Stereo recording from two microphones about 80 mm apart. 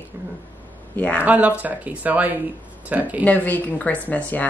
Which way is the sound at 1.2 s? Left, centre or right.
Centre.